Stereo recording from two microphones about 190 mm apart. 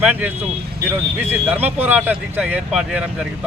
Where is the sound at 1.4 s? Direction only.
10° right (ahead or behind).